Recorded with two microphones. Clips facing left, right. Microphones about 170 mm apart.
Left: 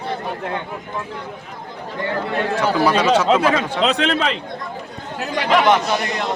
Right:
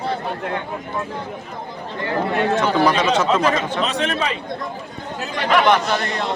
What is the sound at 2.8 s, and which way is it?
Speech, 10° left (ahead or behind).